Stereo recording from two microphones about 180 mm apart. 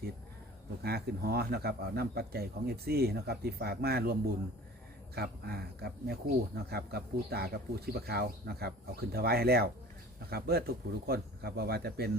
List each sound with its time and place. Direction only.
0.8 s speech: 60° right (ahead or behind)